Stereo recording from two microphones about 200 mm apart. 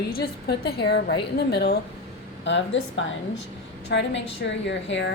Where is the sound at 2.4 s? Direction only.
65° left (ahead or behind).